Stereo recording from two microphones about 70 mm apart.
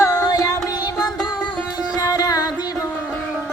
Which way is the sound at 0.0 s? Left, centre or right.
Left.